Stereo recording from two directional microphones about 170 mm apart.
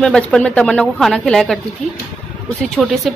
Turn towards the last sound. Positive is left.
turn(degrees=0)  # may be behind; listen again after turning